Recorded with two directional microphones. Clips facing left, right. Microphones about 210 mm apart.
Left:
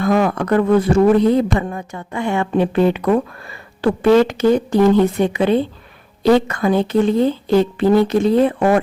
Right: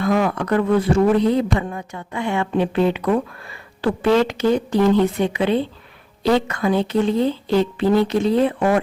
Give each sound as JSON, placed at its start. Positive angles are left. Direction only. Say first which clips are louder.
{"t": 0.0, "sound": "a man's voice", "louder": "left 3 dB", "side_deg": 45}